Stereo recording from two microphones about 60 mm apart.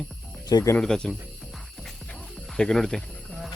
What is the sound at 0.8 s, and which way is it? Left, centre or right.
Speech, centre.